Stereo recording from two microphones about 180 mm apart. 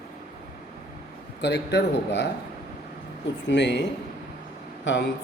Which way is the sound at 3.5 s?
75° left (ahead or behind).